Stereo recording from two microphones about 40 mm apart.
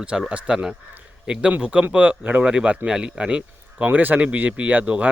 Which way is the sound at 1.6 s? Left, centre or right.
Right.